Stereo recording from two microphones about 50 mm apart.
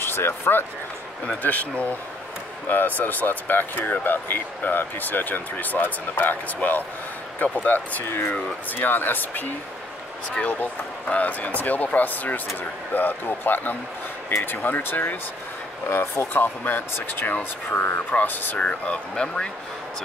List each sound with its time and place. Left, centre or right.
0.0 s speech: left
1.4 s speech: left
18.6 s speech: left